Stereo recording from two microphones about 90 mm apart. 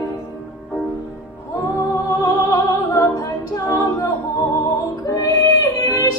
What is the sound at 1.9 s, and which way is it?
Music, 35° left (ahead or behind).